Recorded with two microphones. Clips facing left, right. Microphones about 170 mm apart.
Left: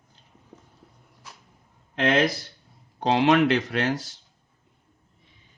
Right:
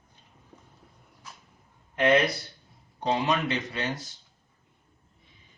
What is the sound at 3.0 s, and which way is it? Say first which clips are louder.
Speech: left 7 dB; 90° left.